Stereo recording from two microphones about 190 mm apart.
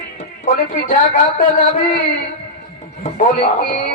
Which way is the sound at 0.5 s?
45° left (ahead or behind).